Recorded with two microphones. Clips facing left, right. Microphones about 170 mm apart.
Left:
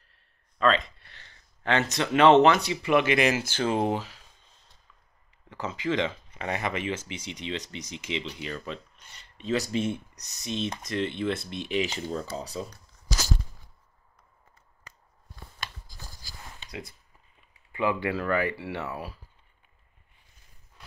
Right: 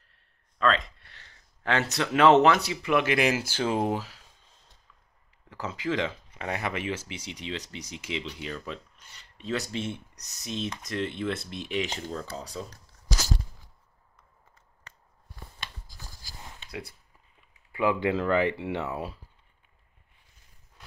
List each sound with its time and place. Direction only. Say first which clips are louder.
0.6 s speech: left 2 dB; centre (ahead or behind)
5.5 s speech: left 1 dB; 5° right (ahead or behind)
9.7 s speech: left 5 dB; 15° left (ahead or behind)
10.4 s speech: left 2 dB; centre (ahead or behind)
12.1 s speech: left 3 dB; 10° left (ahead or behind)
17.7 s speech: right 2 dB; 15° right (ahead or behind)